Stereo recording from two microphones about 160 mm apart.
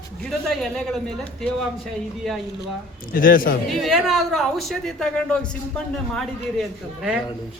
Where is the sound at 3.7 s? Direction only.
Centre (ahead or behind).